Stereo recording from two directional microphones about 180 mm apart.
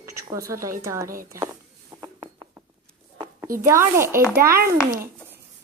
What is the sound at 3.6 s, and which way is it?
Speech, 15° right (ahead or behind).